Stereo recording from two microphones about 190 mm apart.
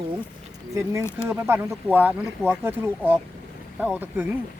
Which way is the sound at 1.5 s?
10° right (ahead or behind).